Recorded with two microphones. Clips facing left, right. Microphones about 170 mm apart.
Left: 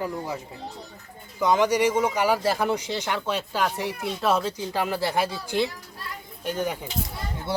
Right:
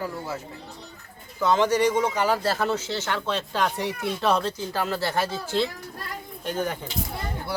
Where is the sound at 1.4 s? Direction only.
15° left (ahead or behind).